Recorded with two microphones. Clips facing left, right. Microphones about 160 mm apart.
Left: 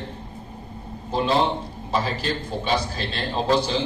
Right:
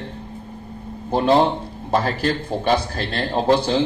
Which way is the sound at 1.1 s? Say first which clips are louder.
Right 5 dB; 55° right (ahead or behind).